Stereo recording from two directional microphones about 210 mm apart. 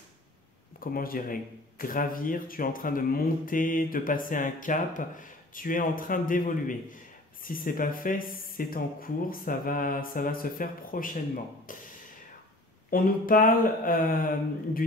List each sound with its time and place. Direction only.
0.7 s speech: 45° left (ahead or behind)
8.4 s mantra: 45° left (ahead or behind)
12.9 s speech: 40° left (ahead or behind)